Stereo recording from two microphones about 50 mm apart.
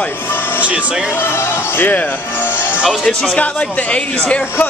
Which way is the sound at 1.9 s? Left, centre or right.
Left.